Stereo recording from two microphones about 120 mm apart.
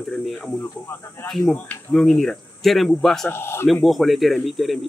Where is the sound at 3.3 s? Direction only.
20° left (ahead or behind).